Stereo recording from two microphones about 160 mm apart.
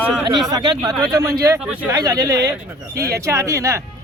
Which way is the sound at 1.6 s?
5° right (ahead or behind).